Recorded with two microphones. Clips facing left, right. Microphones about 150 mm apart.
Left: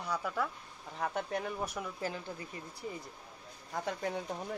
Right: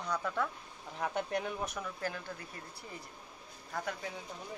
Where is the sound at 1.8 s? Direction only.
20° left (ahead or behind).